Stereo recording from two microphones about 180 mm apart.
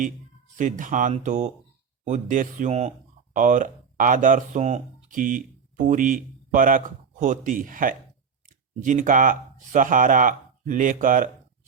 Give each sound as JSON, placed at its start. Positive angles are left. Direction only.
{"t": 0.5, "sound": "speech", "side_deg": -45}